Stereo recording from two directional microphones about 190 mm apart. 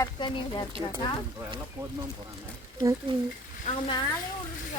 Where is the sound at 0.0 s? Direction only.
20° left (ahead or behind).